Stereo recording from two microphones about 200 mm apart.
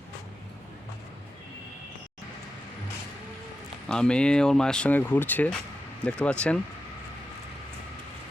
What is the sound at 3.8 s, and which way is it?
Speech, 5° left (ahead or behind).